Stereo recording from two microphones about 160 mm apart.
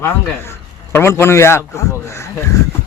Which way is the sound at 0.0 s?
15° left (ahead or behind).